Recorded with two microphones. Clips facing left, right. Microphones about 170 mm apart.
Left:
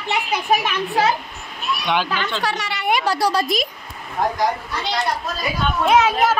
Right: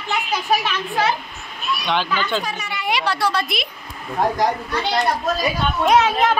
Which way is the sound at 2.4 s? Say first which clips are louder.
Left 3 dB; 90° left.